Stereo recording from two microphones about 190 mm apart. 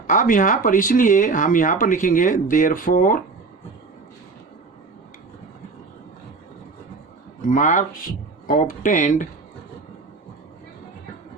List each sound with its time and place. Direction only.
0.1 s speech: 45° left (ahead or behind)
7.4 s speech: 45° left (ahead or behind)